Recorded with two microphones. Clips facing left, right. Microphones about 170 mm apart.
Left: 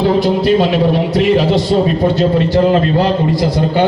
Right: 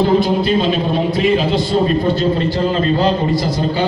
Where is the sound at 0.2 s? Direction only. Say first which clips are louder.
Left 3 dB; 75° left (ahead or behind).